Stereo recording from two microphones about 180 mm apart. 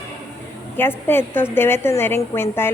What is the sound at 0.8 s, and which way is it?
A woman's voice, 10° left (ahead or behind).